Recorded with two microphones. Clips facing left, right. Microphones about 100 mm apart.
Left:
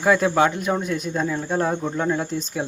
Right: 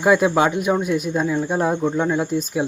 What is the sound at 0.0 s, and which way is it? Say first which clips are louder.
Speech: right 2 dB; 15° right (ahead or behind).